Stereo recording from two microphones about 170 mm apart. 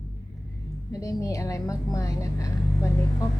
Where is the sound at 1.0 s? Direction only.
20° left (ahead or behind).